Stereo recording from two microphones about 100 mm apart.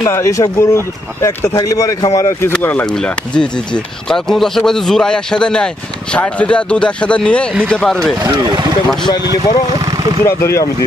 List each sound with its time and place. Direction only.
0.0 s speech: 30° left (ahead or behind)
2.6 s speech: 15° left (ahead or behind)
8.2 s speech: 40° right (ahead or behind)
9.8 s vehicle: 40° right (ahead or behind)
10.2 s speech: 25° left (ahead or behind)